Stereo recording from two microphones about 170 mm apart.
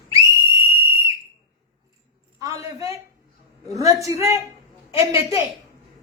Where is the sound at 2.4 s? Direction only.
20° right (ahead or behind).